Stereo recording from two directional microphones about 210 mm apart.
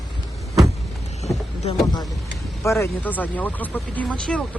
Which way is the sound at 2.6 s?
15° left (ahead or behind).